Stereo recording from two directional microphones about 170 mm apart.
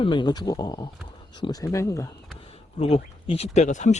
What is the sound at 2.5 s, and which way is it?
Speech, 35° left (ahead or behind).